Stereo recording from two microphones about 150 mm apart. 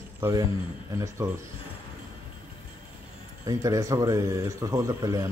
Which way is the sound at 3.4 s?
20° right (ahead or behind).